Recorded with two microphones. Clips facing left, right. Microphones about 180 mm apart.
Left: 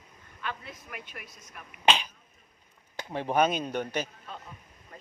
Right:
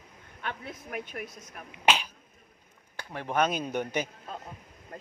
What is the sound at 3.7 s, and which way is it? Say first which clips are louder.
Speech: right 1 dB; 15° right (ahead or behind).